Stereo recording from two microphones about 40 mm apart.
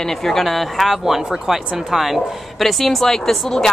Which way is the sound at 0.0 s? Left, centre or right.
Centre.